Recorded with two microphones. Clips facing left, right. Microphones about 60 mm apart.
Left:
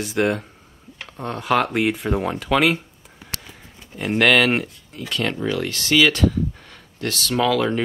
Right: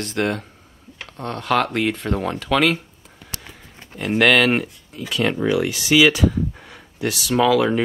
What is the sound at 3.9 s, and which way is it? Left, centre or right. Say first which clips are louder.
Speech: right 1 dB; centre.